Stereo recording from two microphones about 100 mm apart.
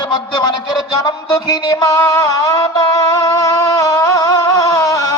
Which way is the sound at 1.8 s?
30° left (ahead or behind).